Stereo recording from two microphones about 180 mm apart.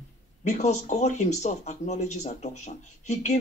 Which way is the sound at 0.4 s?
40° left (ahead or behind).